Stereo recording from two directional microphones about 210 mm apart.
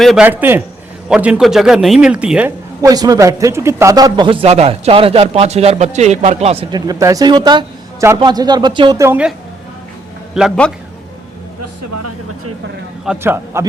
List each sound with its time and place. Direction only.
0.0 s a man's voice: 5° right (ahead or behind)
2.8 s speech: 20° right (ahead or behind)
10.3 s a man's voice: centre (ahead or behind)
13.1 s a man's voice: 10° right (ahead or behind)